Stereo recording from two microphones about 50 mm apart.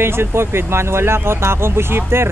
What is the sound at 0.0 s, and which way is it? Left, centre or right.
Speech, right.